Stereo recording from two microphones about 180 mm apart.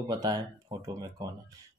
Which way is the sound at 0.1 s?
20° right (ahead or behind).